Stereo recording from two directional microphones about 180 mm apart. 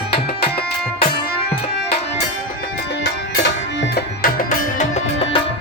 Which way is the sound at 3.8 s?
60° left (ahead or behind).